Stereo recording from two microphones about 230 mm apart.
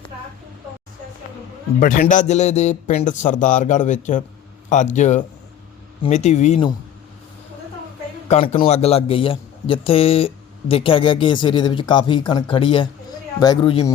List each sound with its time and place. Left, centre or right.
1.8 s a man's voice: left
8.3 s a man's voice: left